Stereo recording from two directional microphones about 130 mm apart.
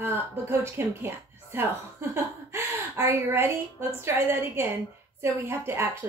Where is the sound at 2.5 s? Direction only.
15° right (ahead or behind).